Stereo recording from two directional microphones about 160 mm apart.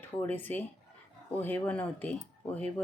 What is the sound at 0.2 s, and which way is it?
Speech, 10° left (ahead or behind).